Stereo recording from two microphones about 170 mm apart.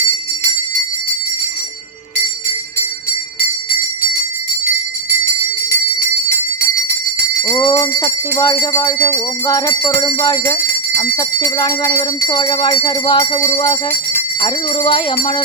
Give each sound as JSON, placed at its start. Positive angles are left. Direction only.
{"t": 7.4, "sound": "speech", "side_deg": 15}
{"t": 11.2, "sound": "jingle bell", "side_deg": 20}
{"t": 14.4, "sound": "speech", "side_deg": 30}